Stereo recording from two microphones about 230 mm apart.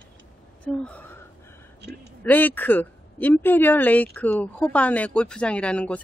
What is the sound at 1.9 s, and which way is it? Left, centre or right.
Speech, centre.